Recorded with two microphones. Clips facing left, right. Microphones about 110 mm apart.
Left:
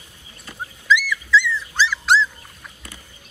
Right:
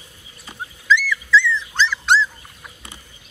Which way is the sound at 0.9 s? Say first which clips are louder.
Right 1 dB; 10° left (ahead or behind).